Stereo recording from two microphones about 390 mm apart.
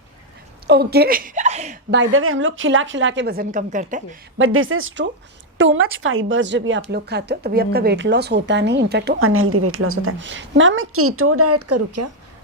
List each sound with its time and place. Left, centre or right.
0.7 s speech: right
4.4 s speech: right